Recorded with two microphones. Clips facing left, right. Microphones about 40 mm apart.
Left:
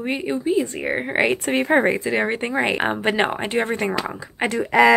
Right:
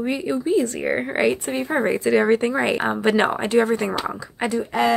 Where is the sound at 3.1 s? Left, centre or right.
Centre; by 4.6 s left.